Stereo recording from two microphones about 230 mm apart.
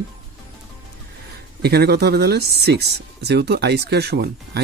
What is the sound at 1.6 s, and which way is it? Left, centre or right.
Speech, right.